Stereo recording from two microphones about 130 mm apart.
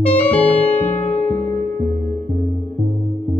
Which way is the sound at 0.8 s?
15° left (ahead or behind).